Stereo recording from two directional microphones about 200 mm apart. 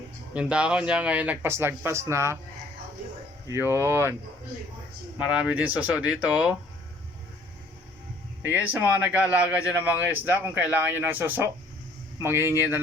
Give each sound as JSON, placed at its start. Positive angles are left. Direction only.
{"t": 0.3, "sound": "speech", "side_deg": -5}
{"t": 3.4, "sound": "speech", "side_deg": -10}
{"t": 5.1, "sound": "speech", "side_deg": -5}
{"t": 8.4, "sound": "speech", "side_deg": -10}